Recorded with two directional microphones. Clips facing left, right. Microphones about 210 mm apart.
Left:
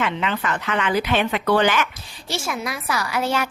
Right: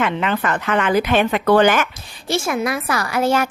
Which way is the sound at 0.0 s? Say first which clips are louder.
Right 4 dB; 50° right (ahead or behind).